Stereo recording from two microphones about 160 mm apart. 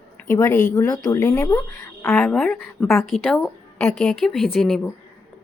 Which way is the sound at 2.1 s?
Centre (ahead or behind).